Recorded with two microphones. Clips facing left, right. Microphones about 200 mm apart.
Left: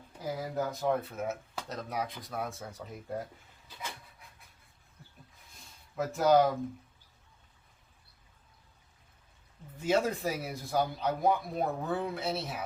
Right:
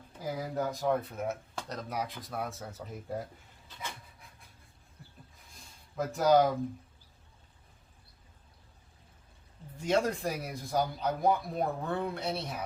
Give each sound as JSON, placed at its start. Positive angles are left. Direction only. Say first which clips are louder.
{"t": 0.3, "sound": "speech", "louder": "right 1 dB", "side_deg": 0}
{"t": 6.0, "sound": "speech", "louder": "even", "side_deg": 0}
{"t": 9.7, "sound": "speech", "louder": "even", "side_deg": 5}